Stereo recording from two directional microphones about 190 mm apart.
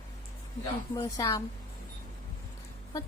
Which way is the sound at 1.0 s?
20° left (ahead or behind).